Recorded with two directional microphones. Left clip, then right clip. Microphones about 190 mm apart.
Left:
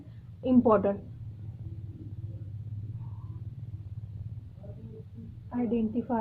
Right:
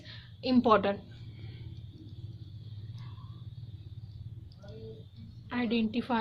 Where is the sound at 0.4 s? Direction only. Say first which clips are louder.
Left 2 dB; 30° right (ahead or behind).